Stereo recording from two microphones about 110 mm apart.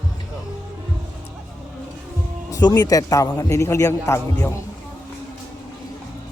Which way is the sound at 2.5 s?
35° left (ahead or behind).